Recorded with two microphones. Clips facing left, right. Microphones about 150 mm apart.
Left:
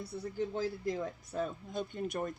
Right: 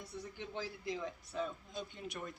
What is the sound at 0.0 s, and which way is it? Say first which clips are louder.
Speech: left 9 dB; 40° left (ahead or behind).